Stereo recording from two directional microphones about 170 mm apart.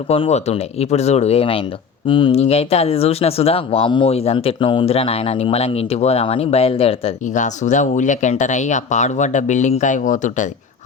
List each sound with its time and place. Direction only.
0.1 s speech: 40° left (ahead or behind)